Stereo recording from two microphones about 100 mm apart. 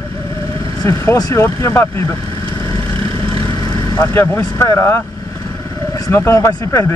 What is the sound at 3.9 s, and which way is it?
Speech, 35° left (ahead or behind).